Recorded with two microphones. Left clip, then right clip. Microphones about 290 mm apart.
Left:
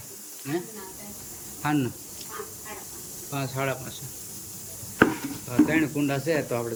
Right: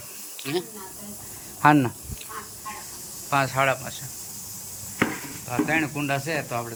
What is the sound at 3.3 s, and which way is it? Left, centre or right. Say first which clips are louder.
Speech: right 8 dB; centre.